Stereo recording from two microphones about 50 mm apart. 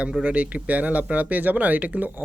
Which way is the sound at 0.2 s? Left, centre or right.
Right.